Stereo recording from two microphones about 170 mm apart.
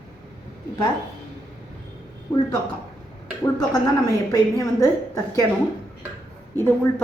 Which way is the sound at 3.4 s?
20° left (ahead or behind).